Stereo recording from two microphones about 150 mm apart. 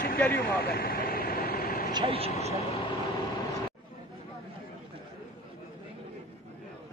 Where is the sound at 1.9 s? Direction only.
35° right (ahead or behind).